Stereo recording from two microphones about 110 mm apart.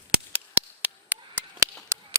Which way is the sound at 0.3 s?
15° right (ahead or behind).